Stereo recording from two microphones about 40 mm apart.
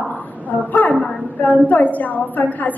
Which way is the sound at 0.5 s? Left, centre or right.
Left.